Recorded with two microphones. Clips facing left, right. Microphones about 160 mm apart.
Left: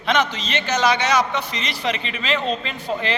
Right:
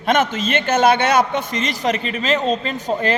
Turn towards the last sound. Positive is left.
turn(degrees=-40)  # may be behind; listen again after turning